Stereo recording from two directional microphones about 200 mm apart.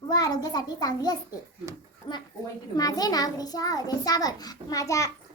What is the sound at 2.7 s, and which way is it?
A child's voice, 20° left (ahead or behind).